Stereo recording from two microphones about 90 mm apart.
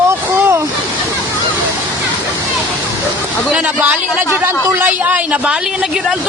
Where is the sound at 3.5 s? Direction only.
10° right (ahead or behind).